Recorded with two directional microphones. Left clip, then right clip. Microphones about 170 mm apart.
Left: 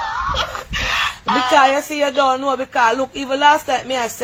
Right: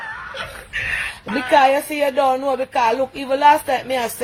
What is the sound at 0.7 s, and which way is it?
Dog, 30° left (ahead or behind).